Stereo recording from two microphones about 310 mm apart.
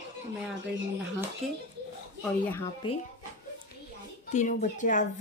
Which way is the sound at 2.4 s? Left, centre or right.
Centre.